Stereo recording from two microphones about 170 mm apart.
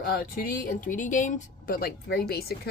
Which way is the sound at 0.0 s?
60° left (ahead or behind).